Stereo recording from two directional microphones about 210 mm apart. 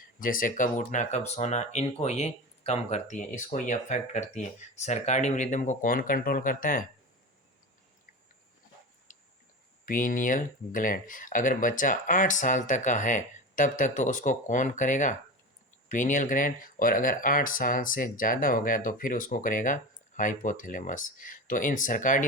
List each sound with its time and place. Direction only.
0.2 s speech: 40° left (ahead or behind)
9.1 s a sound: 40° left (ahead or behind)
9.8 s speech: 40° left (ahead or behind)